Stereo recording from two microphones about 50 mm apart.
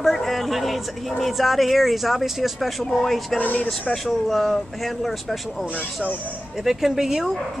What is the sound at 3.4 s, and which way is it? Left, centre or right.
Speech, left.